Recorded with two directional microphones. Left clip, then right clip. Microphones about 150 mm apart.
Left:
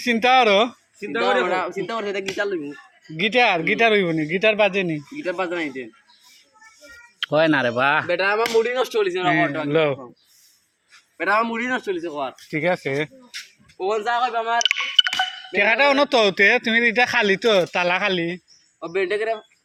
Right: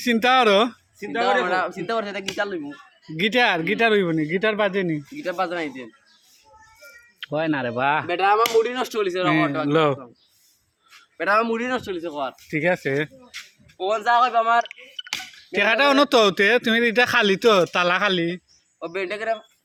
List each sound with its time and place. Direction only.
0.0 s speech: 40° right (ahead or behind)
0.9 s a man's voice: 10° right (ahead or behind)
3.2 s speech: 40° right (ahead or behind)
5.1 s a man's voice: 10° right (ahead or behind)
7.2 s speech: 5° left (ahead or behind)
7.8 s a man's voice: 20° right (ahead or behind)
8.1 s speech: 35° right (ahead or behind)
11.2 s a man's voice: 15° right (ahead or behind)
12.5 s speech: 45° right (ahead or behind)
13.3 s speech: 10° right (ahead or behind)
14.6 s speech: 90° left
15.5 s a man's voice: 55° right (ahead or behind)
18.8 s a man's voice: 20° right (ahead or behind)